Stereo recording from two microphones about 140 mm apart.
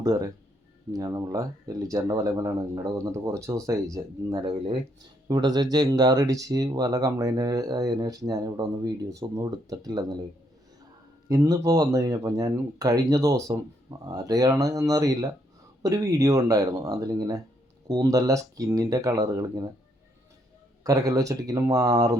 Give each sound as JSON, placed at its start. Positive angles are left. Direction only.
{"t": 0.0, "sound": "speech", "side_deg": -25}
{"t": 5.3, "sound": "speech", "side_deg": -30}
{"t": 11.3, "sound": "speech", "side_deg": -25}
{"t": 20.8, "sound": "speech", "side_deg": -25}